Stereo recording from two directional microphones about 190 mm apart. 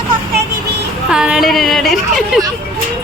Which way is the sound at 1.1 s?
5° right (ahead or behind).